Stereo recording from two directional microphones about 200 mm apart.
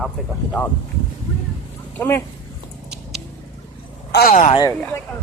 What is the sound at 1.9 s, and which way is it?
Speech, 10° left (ahead or behind).